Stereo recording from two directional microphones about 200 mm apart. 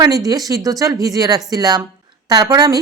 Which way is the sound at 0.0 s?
20° right (ahead or behind).